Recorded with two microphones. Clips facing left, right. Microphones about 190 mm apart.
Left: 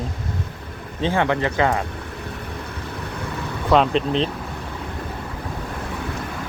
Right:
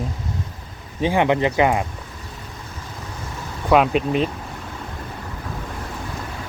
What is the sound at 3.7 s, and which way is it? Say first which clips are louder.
Speech: right 1 dB; 10° right (ahead or behind).